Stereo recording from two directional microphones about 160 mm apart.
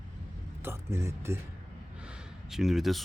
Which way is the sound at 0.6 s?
15° right (ahead or behind).